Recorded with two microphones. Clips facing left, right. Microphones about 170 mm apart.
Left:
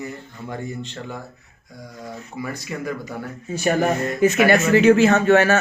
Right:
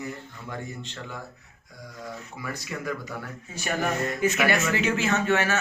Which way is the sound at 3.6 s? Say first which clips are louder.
Left 7 dB; 40° left (ahead or behind).